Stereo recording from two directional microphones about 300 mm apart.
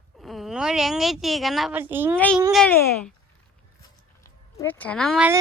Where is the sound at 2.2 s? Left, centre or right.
Centre.